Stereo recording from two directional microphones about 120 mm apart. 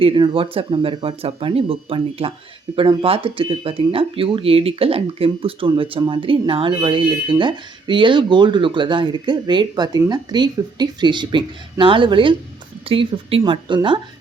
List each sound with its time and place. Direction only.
0.0 s speech: 45° right (ahead or behind)
13.4 s speech: 40° right (ahead or behind)